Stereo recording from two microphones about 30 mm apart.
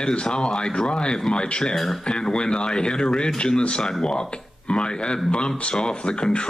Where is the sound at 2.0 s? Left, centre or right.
Left.